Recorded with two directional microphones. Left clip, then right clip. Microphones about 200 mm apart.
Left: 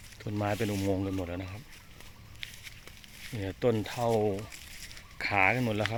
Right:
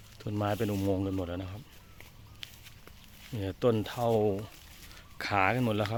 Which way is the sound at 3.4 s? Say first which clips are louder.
Right 1 dB; 15° right (ahead or behind).